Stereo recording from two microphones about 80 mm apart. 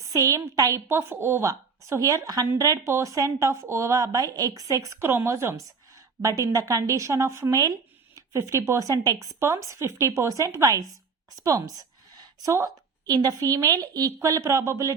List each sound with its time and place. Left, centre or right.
0.1 s a woman's voice: right
0.9 s speech: right
1.5 s a woman's voice: right
4.9 s a woman's voice: right
9.4 s speech: right
11.4 s a sound: right
12.5 s a woman's voice: right